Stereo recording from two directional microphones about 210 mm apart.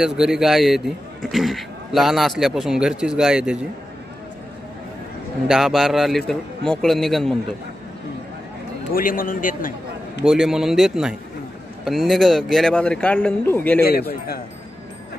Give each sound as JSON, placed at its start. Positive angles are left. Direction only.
{"t": 0.0, "sound": "a man's voice", "side_deg": 0}
{"t": 5.5, "sound": "a man's voice", "side_deg": 0}
{"t": 8.9, "sound": "a man's voice", "side_deg": 40}
{"t": 10.2, "sound": "a man's voice", "side_deg": 0}
{"t": 13.7, "sound": "speech", "side_deg": 45}